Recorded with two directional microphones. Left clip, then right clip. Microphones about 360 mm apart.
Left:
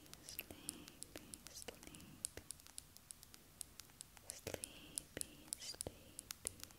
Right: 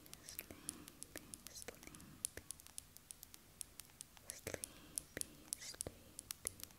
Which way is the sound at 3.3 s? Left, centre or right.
Centre.